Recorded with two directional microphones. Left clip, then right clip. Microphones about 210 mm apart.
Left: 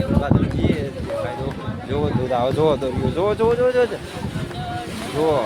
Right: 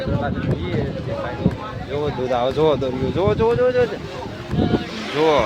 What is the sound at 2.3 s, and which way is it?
Speech, centre (ahead or behind).